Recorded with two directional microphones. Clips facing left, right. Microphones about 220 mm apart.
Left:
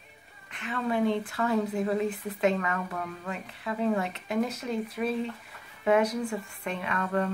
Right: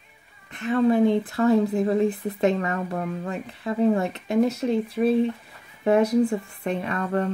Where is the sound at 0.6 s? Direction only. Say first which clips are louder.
Right 9 dB; 40° right (ahead or behind).